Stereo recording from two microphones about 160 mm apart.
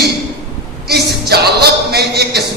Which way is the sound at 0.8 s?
80° right.